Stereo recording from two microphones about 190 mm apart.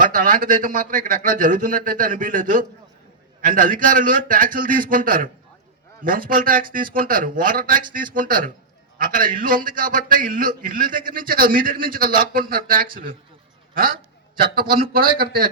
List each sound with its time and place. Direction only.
0.0 s a man's voice: 45° right (ahead or behind)
14.4 s a man's voice: 50° right (ahead or behind)